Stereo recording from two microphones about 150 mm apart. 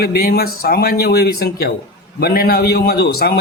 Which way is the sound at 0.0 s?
90° left.